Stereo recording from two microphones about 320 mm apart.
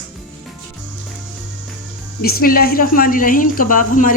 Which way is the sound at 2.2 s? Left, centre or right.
Left.